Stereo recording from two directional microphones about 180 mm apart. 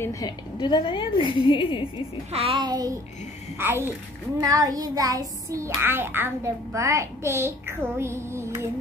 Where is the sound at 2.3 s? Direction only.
30° right (ahead or behind).